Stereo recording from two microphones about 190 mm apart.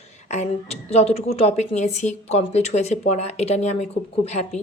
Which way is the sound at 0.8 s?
35° left (ahead or behind).